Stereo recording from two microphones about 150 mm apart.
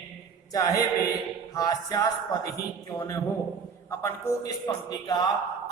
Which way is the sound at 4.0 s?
20° left (ahead or behind).